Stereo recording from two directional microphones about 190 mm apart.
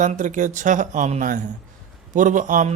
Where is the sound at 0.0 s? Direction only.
40° right (ahead or behind).